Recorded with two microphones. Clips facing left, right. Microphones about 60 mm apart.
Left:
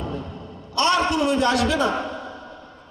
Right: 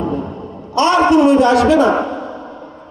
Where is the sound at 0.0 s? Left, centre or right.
Right.